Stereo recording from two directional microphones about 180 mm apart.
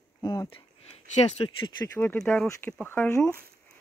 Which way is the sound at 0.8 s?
35° left (ahead or behind).